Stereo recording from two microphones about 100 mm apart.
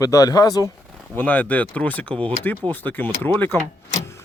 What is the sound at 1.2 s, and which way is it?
Speech, 15° left (ahead or behind).